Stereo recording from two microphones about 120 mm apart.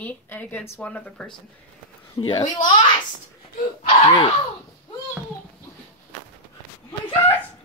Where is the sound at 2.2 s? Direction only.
40° left (ahead or behind).